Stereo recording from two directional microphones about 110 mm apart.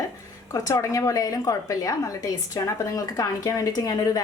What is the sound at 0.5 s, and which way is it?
A woman's voice, 30° left (ahead or behind).